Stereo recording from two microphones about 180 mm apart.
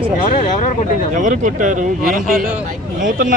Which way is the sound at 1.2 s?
45° right (ahead or behind).